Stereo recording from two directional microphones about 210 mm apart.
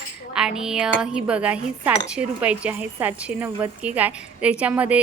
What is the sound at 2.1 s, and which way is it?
A woman's voice, 5° right (ahead or behind).